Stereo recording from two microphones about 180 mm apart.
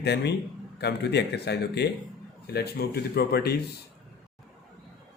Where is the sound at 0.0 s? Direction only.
70° left (ahead or behind).